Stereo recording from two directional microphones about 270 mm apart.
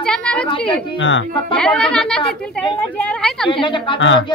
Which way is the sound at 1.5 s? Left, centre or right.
Centre.